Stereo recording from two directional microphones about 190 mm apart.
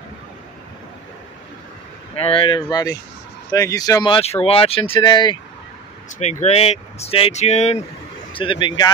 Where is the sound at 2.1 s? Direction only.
30° left (ahead or behind).